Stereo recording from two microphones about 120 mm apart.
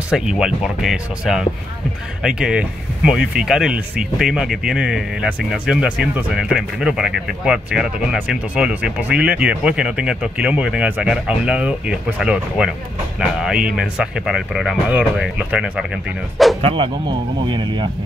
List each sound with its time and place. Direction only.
0.1 s speech: 5° right (ahead or behind)
16.6 s speech: 45° right (ahead or behind)